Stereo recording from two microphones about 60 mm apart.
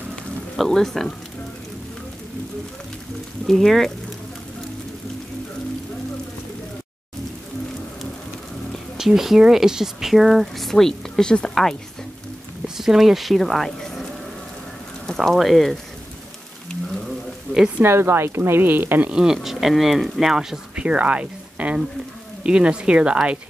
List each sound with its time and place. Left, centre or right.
0.1 s music: centre
3.4 s speech: centre
8.9 s speech: centre
12.6 s speech: centre
13.7 s a sound: centre
15.0 s speech: centre
17.7 s speech: right
19.1 s speech: centre
20.8 s speech: right